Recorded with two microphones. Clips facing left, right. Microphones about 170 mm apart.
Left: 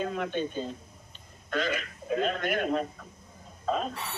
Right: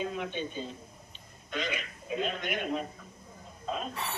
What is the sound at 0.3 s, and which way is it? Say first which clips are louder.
Speech: left 5 dB; 50° left (ahead or behind).